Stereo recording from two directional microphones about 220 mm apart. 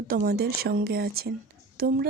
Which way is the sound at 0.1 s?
40° right (ahead or behind).